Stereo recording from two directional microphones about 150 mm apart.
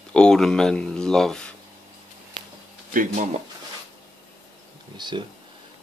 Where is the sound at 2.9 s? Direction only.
65° right (ahead or behind).